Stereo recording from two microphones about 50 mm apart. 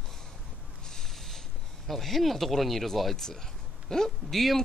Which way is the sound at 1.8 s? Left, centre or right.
Centre.